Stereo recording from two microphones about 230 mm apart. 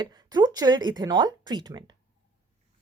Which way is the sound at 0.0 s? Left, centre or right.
Centre.